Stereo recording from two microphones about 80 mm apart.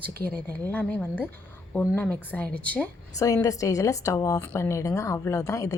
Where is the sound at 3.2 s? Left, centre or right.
Left.